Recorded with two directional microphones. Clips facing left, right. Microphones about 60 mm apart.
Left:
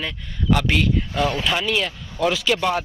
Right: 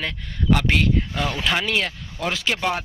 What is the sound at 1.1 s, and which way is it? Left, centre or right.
Speech, left.